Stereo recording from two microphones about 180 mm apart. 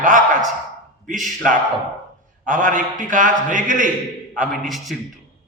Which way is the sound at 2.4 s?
45° right (ahead or behind).